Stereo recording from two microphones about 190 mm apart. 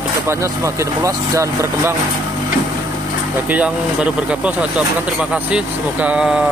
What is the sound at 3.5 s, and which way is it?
Speech, 5° right (ahead or behind).